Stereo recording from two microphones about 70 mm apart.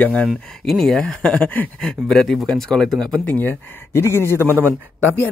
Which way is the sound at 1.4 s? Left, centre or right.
Left.